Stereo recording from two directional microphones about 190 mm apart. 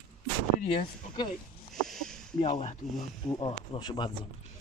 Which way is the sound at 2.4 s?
30° left (ahead or behind).